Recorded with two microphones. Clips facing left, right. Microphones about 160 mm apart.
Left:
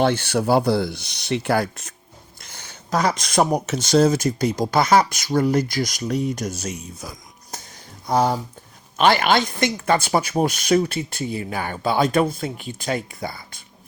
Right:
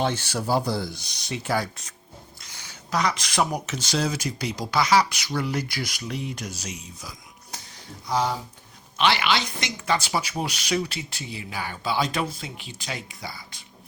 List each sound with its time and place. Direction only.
0.0 s speech: 60° left (ahead or behind)
2.4 s a sound: 50° left (ahead or behind)
3.2 s speech: 40° left (ahead or behind)